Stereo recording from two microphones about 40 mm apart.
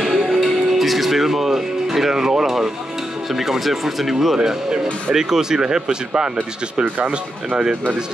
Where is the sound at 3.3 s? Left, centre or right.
Centre.